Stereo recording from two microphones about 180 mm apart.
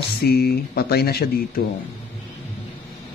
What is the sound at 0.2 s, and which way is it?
Speech, 60° left (ahead or behind).